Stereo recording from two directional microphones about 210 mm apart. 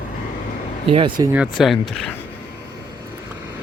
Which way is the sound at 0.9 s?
25° right (ahead or behind).